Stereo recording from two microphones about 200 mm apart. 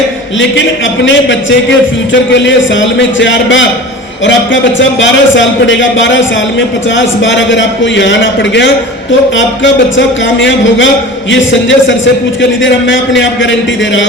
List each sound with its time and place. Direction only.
1.0 s a man's voice: 65° left (ahead or behind)
10.2 s a man's voice: 70° left (ahead or behind)